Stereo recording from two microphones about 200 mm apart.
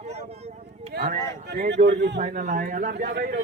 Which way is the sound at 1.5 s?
55° right (ahead or behind).